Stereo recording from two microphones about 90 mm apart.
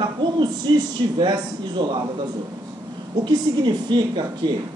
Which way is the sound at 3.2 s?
55° right (ahead or behind).